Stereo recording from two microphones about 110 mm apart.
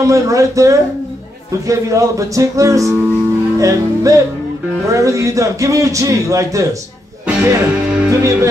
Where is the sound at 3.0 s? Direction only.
20° right (ahead or behind).